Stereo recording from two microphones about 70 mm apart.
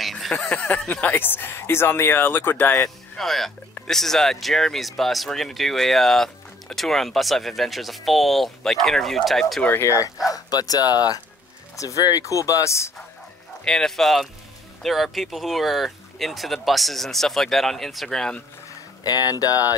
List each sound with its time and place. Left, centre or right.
0.0 s a sound: centre
0.6 s speech: left
3.2 s speech: centre
9.7 s speech: left
10.2 s speech: left
11.7 s speech: left
13.7 s speech: centre
19.0 s speech: left